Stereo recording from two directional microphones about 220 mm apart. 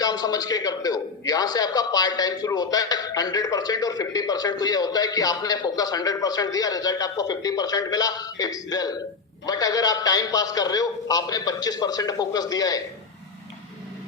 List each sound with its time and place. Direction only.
0.0 s a man's voice: 15° left (ahead or behind)